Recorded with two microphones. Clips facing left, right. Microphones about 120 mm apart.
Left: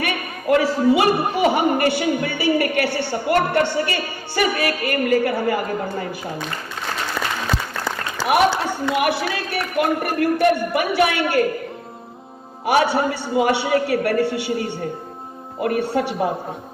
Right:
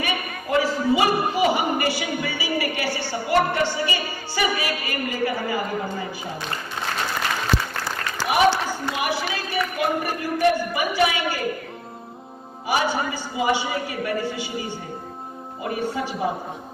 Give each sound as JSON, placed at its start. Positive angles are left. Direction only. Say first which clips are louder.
{"t": 0.0, "sound": "a man's voice", "louder": "left 3 dB", "side_deg": 65}
{"t": 8.6, "sound": "a man's voice", "louder": "left 6 dB", "side_deg": 65}
{"t": 12.6, "sound": "a man's voice", "louder": "left 6 dB", "side_deg": 65}